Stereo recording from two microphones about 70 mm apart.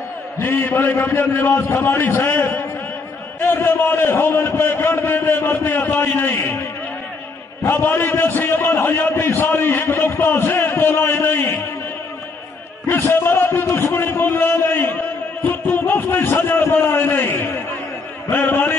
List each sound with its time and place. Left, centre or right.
0.4 s a man's voice: left
7.6 s a man's voice: left
13.1 s a man's voice: left
13.7 s a man's voice: left
13.9 s a man's voice: left
16.7 s a sound: left
18.3 s a man's voice: left